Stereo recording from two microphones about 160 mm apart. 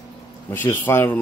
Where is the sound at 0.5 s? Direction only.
15° left (ahead or behind).